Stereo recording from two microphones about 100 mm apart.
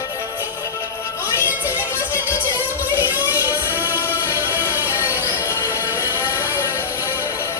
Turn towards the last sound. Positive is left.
turn(degrees=25)  # may be behind; listen again after turning